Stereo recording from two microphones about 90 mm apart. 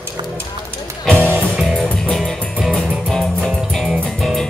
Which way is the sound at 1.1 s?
20° right (ahead or behind).